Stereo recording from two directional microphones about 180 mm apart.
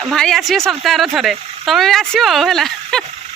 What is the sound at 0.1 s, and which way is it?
Speech, centre (ahead or behind).